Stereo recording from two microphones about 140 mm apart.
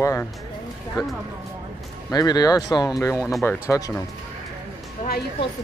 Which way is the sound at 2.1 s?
30° left (ahead or behind).